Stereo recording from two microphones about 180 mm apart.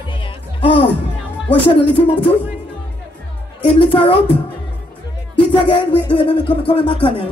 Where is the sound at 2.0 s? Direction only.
30° left (ahead or behind).